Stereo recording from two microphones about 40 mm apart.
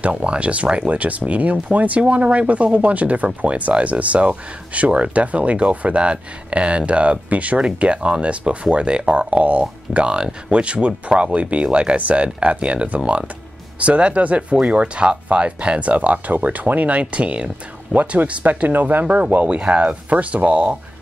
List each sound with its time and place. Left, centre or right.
0.0 s speech: right
18.4 s speech: right